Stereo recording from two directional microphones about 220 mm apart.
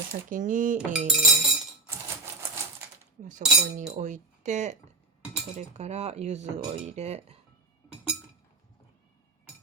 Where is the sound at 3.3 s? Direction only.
35° right (ahead or behind).